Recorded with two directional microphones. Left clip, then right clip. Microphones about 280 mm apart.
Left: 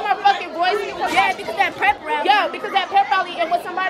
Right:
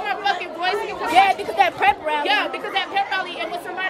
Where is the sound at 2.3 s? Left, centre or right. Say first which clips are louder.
Left 4 dB; centre.